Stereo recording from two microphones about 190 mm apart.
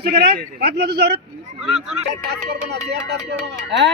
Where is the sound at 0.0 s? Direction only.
60° right (ahead or behind).